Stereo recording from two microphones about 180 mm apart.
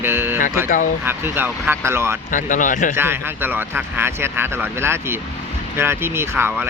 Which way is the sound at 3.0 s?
10° right (ahead or behind).